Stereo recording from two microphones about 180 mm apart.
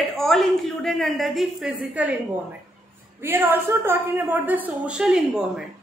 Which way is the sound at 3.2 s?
15° right (ahead or behind).